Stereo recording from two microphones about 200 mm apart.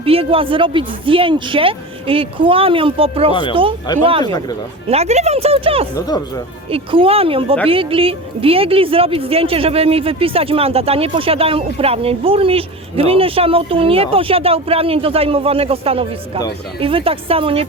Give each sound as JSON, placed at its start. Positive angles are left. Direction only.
{"t": 0.0, "sound": "speech", "side_deg": -30}
{"t": 4.2, "sound": "speech", "side_deg": 20}
{"t": 4.9, "sound": "speech", "side_deg": -30}
{"t": 6.1, "sound": "speech", "side_deg": 20}
{"t": 6.7, "sound": "speech", "side_deg": -30}